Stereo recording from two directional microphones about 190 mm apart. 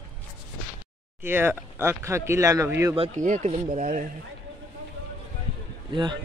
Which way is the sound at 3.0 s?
40° right (ahead or behind).